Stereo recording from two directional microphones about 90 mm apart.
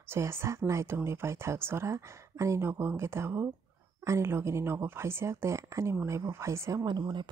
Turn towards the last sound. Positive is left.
turn(degrees=-55)  # may be behind; listen again after turning